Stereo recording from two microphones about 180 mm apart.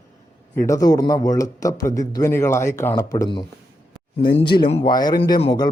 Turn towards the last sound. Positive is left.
turn(degrees=25)  # may be behind; listen again after turning